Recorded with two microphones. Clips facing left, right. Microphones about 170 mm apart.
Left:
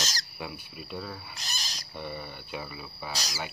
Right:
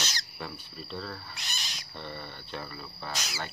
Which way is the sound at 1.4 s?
40° left (ahead or behind).